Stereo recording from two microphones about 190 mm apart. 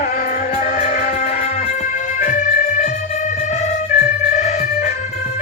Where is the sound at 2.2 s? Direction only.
45° left (ahead or behind).